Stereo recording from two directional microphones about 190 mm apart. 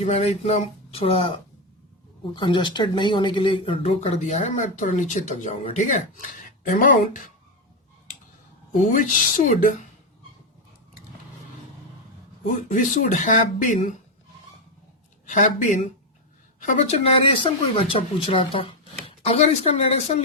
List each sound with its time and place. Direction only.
0.0 s speech: 35° left (ahead or behind)
8.8 s speech: 45° left (ahead or behind)
12.7 s speech: 40° left (ahead or behind)
15.3 s speech: 40° left (ahead or behind)